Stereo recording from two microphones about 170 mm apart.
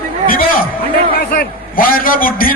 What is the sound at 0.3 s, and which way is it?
A man's voice, 55° left (ahead or behind).